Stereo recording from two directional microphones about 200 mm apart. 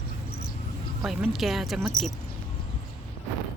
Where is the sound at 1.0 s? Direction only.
Centre (ahead or behind).